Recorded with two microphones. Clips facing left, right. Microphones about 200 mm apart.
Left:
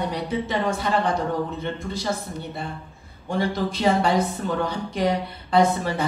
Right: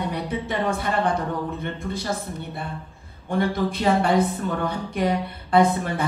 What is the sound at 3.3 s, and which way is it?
Speech, 55° right (ahead or behind).